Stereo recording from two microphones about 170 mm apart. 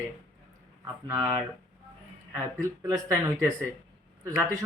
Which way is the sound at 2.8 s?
20° right (ahead or behind).